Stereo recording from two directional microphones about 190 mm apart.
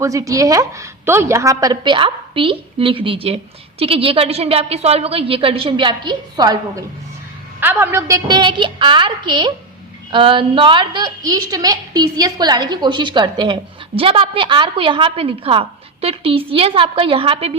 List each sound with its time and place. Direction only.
0.0 s a woman's voice: 15° right (ahead or behind)
7.6 s a woman's voice: 10° right (ahead or behind); by 17.5 s 30° right (ahead or behind)